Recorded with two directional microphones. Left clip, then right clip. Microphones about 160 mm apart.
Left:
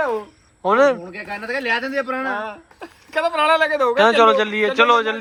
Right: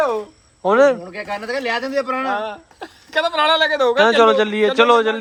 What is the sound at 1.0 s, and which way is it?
Speech, 35° right (ahead or behind).